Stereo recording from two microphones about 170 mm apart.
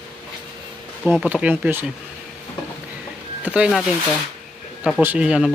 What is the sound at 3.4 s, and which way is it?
Speech, 5° right (ahead or behind).